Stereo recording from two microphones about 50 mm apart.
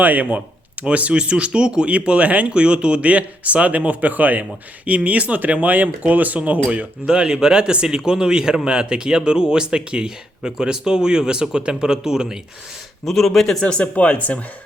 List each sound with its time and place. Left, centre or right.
0.0 s a man's voice: right; by 12.4 s centre
13.1 s speech: centre
13.7 s speech: left